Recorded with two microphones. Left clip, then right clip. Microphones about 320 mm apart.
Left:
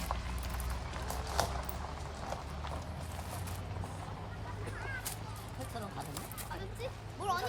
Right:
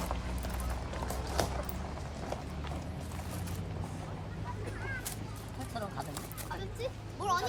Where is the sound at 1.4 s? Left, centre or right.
Centre.